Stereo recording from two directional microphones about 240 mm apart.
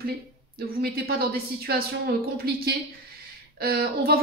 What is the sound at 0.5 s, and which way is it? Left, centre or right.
A woman's voice, right.